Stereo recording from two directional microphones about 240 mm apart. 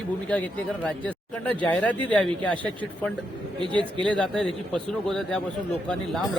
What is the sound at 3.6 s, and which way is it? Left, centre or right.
Speech, centre.